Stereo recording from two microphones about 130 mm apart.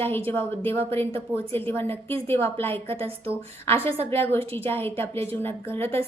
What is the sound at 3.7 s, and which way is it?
Speech, 50° right (ahead or behind).